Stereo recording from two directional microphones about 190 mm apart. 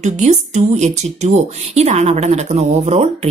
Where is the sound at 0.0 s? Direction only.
40° right (ahead or behind).